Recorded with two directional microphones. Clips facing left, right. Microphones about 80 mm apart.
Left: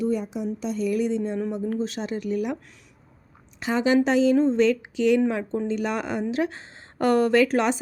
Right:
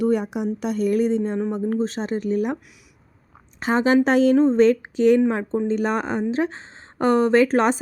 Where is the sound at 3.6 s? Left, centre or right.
Right.